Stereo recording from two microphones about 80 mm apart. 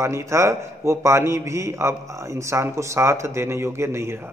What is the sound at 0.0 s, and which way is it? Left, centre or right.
A man's voice, right.